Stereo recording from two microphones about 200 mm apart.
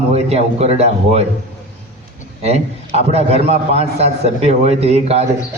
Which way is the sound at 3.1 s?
30° right (ahead or behind).